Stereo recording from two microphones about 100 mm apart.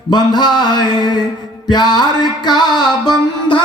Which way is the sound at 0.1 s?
45° left (ahead or behind).